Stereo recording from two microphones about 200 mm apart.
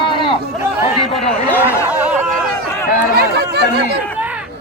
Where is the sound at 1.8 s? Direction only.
10° right (ahead or behind).